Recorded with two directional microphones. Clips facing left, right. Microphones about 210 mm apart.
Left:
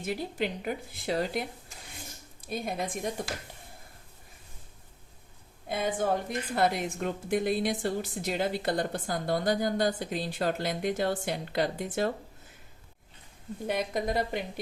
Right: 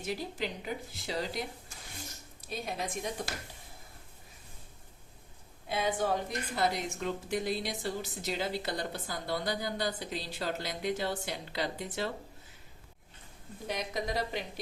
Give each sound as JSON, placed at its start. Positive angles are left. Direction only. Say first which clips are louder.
{"t": 0.0, "sound": "a woman's voice", "louder": "left 4 dB", "side_deg": 55}
{"t": 5.6, "sound": "a woman's voice", "louder": "left 2 dB", "side_deg": 50}
{"t": 13.7, "sound": "a woman's voice", "louder": "left 5 dB", "side_deg": 50}